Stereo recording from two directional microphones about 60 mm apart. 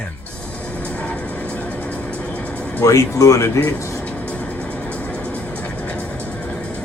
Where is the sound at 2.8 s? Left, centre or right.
Left.